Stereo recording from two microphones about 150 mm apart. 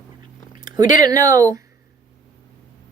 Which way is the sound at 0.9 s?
25° right (ahead or behind).